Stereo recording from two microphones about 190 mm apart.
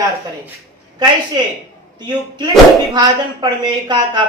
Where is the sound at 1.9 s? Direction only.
20° right (ahead or behind).